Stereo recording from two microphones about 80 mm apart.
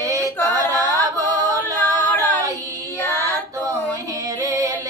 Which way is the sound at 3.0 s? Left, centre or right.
Left.